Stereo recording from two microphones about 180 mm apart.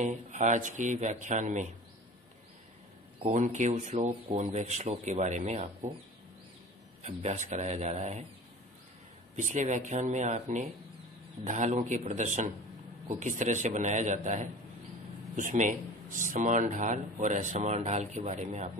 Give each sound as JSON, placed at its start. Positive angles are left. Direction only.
{"t": 0.0, "sound": "speech", "side_deg": -40}
{"t": 3.3, "sound": "speech", "side_deg": -45}
{"t": 7.0, "sound": "speech", "side_deg": -40}
{"t": 9.4, "sound": "speech", "side_deg": -45}